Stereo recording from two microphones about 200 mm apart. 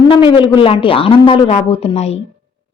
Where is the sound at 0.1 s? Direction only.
25° left (ahead or behind).